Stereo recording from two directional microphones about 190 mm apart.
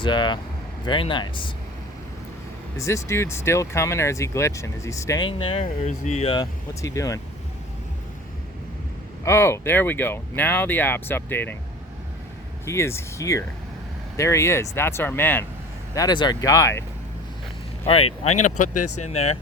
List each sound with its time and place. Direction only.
0.0 s speech: 25° left (ahead or behind)
2.7 s speech: 15° left (ahead or behind)
9.2 s speech: 15° left (ahead or behind)
12.6 s speech: 15° left (ahead or behind)
16.0 s speech: 20° left (ahead or behind)
17.8 s speech: 30° left (ahead or behind)